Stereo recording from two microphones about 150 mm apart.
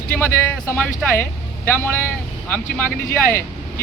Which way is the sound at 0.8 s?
15° left (ahead or behind).